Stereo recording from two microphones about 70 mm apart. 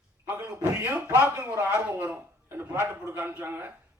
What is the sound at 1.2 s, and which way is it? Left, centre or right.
A man's voice, right.